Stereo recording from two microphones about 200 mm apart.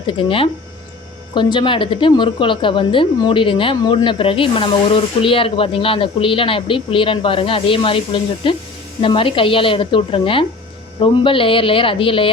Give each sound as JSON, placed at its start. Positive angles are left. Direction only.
{"t": 0.1, "sound": "a woman's voice", "side_deg": 25}